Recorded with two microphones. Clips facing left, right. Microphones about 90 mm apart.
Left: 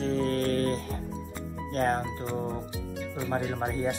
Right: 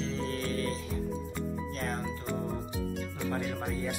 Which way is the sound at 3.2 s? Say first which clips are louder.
Left 5 dB; 30° left (ahead or behind).